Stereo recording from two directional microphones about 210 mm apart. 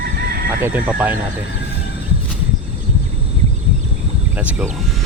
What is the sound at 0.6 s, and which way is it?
Speech, 10° right (ahead or behind).